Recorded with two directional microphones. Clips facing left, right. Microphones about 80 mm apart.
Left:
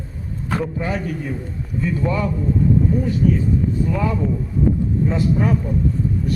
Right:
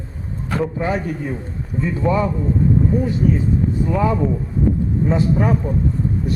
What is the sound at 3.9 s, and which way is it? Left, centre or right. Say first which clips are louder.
Speech: right 3 dB; right.